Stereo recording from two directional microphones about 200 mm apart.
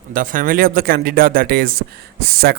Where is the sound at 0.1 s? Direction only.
45° right (ahead or behind).